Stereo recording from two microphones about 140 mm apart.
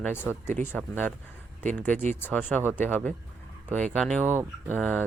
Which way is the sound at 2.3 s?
15° left (ahead or behind).